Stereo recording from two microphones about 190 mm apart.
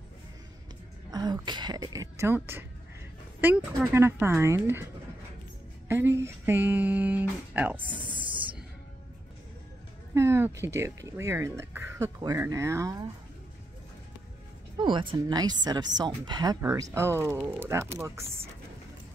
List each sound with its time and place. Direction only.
1.1 s speech: 20° right (ahead or behind)
5.9 s speech: 15° right (ahead or behind)
10.1 s speech: 15° right (ahead or behind)
14.8 s speech: 25° right (ahead or behind)